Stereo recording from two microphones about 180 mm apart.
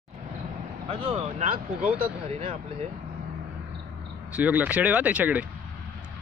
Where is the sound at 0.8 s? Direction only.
30° right (ahead or behind).